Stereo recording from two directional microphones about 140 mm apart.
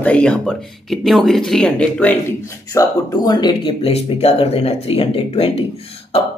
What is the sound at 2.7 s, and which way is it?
Speech, 30° left (ahead or behind).